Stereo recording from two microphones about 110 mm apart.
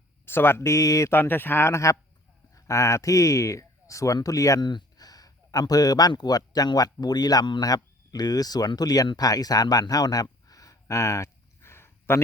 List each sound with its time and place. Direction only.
0.3 s speech: 20° left (ahead or behind)